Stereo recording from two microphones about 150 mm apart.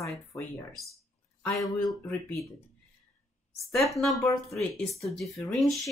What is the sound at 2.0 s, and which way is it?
Speech, 10° left (ahead or behind).